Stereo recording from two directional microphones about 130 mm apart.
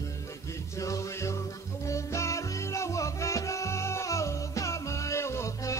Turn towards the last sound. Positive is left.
turn(degrees=20)  # may be behind; listen again after turning